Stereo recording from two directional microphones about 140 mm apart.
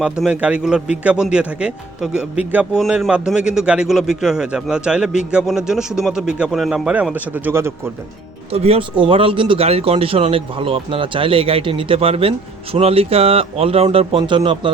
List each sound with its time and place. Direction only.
0.0 s a man's voice: 5° right (ahead or behind)
8.5 s speech: 45° right (ahead or behind)